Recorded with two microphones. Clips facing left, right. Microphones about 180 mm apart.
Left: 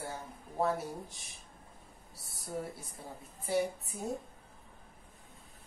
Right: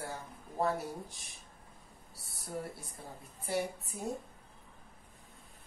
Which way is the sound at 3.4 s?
Centre (ahead or behind).